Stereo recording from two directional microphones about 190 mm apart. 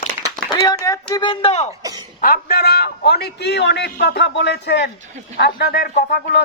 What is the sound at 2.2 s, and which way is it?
A man's voice, 50° left (ahead or behind).